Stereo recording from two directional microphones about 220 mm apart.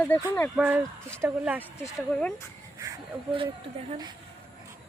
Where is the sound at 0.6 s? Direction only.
10° right (ahead or behind).